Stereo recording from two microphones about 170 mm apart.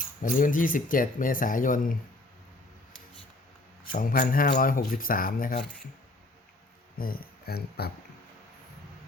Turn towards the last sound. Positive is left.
turn(degrees=65)  # may be behind; listen again after turning